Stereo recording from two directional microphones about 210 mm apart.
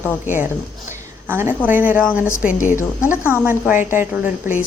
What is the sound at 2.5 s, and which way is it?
Speech, 40° left (ahead or behind).